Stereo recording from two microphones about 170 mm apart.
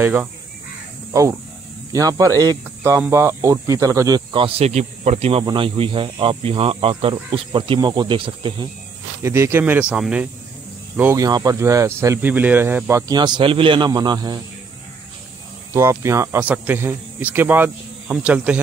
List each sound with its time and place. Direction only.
0.0 s speech: 5° right (ahead or behind)
1.9 s speech: 20° right (ahead or behind)
9.2 s speech: 15° right (ahead or behind)
11.0 s speech: 15° right (ahead or behind)
13.1 s speech: 25° right (ahead or behind)
15.7 s speech: 15° right (ahead or behind)